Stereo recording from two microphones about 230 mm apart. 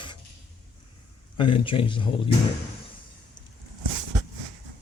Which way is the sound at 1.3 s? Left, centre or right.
Left.